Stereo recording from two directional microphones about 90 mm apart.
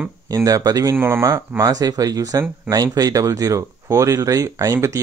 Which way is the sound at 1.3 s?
40° right (ahead or behind).